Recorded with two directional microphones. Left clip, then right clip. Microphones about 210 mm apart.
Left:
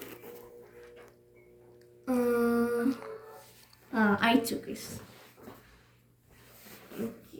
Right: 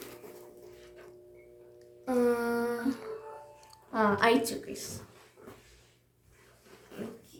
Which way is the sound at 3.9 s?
15° right (ahead or behind).